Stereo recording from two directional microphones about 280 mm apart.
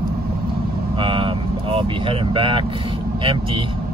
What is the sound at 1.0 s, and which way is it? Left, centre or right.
Speech, centre.